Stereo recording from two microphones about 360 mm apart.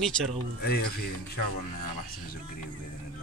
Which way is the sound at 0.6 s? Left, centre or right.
Left.